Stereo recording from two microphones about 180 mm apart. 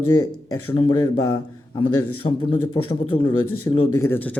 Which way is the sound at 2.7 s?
30° left (ahead or behind).